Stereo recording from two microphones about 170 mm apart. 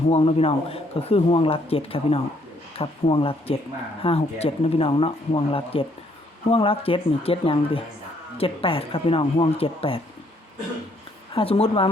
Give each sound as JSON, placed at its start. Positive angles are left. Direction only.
{"t": 0.1, "sound": "speech", "side_deg": 35}
{"t": 11.3, "sound": "speech", "side_deg": 35}